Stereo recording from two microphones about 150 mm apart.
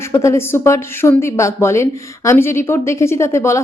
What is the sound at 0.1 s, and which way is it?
A woman's voice, 20° left (ahead or behind).